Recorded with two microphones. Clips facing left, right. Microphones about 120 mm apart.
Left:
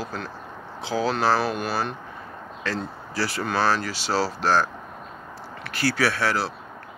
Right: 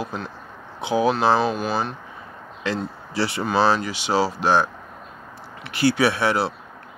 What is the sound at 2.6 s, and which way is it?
Speech, 20° right (ahead or behind).